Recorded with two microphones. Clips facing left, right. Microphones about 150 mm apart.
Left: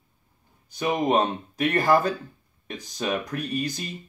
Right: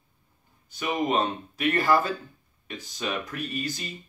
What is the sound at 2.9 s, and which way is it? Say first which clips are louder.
Speech: left 4 dB; 40° left (ahead or behind).